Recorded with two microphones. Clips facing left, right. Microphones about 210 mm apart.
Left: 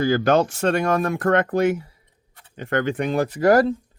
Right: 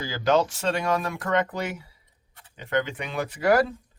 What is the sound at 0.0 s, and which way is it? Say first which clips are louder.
Speech: left 5 dB; 55° left (ahead or behind).